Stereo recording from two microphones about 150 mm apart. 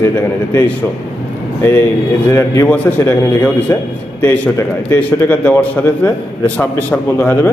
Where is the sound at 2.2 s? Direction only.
15° left (ahead or behind).